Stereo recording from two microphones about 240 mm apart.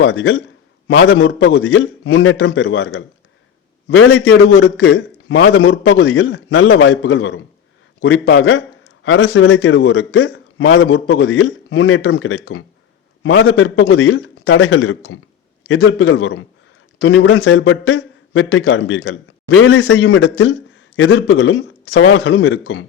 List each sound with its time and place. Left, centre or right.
0.0 s a man's voice: left